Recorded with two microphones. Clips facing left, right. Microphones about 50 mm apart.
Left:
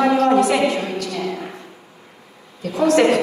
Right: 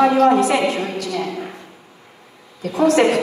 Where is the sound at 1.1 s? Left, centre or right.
Right.